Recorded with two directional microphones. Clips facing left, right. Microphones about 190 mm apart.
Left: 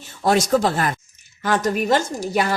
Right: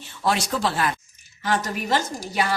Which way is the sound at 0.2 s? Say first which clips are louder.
Left 6 dB; 45° left (ahead or behind).